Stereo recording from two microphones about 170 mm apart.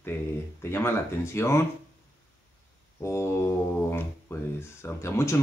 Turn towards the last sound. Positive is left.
turn(degrees=15)  # may be behind; listen again after turning